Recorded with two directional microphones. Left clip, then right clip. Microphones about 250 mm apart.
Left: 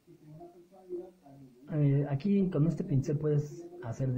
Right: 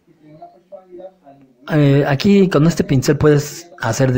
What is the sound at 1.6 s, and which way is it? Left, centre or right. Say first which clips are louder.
Speech: right 19 dB; right.